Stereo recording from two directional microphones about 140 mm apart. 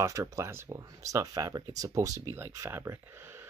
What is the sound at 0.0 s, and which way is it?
Speech, 25° right (ahead or behind).